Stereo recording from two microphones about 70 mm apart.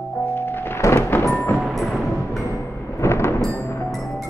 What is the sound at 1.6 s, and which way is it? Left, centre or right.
Music, centre.